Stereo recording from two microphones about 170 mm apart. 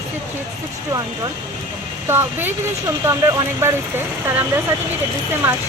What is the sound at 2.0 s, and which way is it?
Speech, 15° right (ahead or behind).